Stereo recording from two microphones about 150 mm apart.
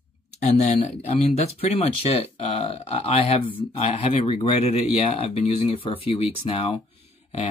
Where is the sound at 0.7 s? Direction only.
50° left (ahead or behind).